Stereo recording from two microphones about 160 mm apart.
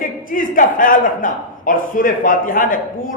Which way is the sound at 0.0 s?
60° left (ahead or behind).